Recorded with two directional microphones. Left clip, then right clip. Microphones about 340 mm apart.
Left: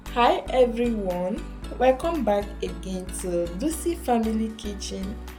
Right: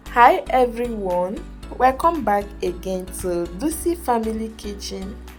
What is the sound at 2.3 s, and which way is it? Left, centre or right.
Speech, right.